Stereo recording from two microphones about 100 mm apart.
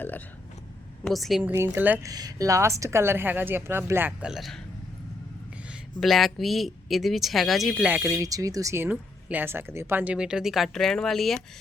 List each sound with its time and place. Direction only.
1.0 s speech: centre (ahead or behind)
1.4 s a woman's voice: 20° right (ahead or behind)
2.0 s speech: 35° right (ahead or behind)
4.2 s speech: 5° right (ahead or behind)
6.0 s speech: centre (ahead or behind)
8.0 s speech: 35° right (ahead or behind); by 11.3 s 5° left (ahead or behind)